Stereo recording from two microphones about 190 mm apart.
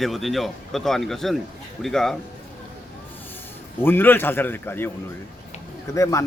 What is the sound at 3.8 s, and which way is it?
A man's voice, 10° left (ahead or behind).